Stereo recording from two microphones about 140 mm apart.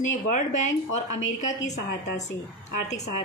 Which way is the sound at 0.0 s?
60° left (ahead or behind).